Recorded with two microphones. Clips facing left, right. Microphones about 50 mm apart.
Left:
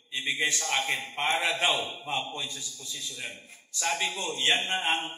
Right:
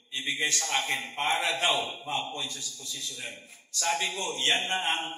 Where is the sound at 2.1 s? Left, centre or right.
Left.